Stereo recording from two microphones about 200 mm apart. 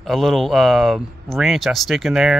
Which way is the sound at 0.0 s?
Centre (ahead or behind).